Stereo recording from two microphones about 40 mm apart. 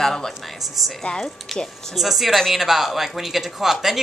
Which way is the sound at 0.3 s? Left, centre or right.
Centre.